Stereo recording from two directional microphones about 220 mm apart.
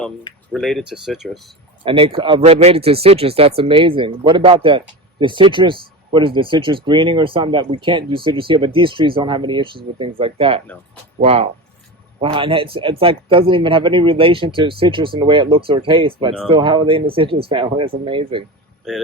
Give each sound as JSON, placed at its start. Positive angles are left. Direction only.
{"t": 0.5, "sound": "speech", "side_deg": 0}
{"t": 1.8, "sound": "speech", "side_deg": -25}